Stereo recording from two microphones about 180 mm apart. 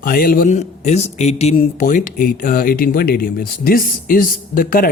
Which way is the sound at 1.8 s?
45° left (ahead or behind).